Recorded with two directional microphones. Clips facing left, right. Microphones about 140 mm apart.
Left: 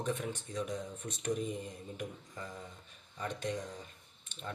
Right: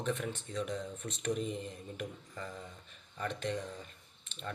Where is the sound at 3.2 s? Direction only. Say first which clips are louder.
Right 1 dB; 15° left (ahead or behind).